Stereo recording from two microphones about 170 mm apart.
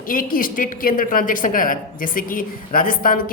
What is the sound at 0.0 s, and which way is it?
A woman's voice, 55° left (ahead or behind).